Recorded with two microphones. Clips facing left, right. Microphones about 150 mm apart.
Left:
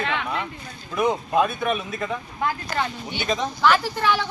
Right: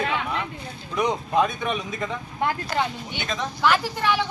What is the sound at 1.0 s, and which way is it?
Speech, 5° left (ahead or behind).